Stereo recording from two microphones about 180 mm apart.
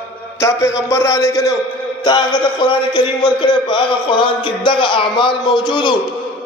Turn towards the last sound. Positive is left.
turn(degrees=25)  # may be behind; listen again after turning